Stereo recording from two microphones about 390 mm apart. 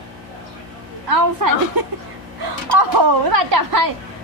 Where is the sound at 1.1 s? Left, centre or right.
Right.